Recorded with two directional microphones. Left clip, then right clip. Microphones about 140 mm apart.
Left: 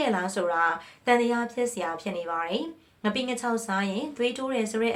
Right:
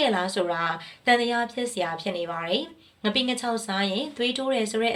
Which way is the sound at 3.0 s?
20° right (ahead or behind).